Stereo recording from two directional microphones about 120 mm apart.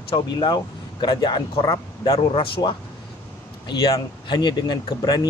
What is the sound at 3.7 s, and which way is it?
Speech, 40° left (ahead or behind).